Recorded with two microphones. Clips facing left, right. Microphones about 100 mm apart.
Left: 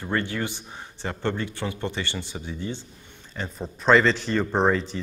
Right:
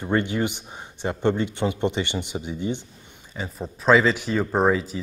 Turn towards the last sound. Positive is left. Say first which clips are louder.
# right 1 dB
turn(degrees=-5)  # may be behind; listen again after turning